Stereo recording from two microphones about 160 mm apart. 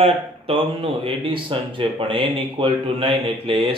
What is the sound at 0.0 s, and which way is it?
Speech, 35° right (ahead or behind).